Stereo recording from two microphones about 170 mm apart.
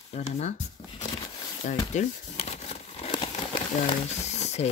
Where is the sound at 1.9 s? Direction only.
40° left (ahead or behind).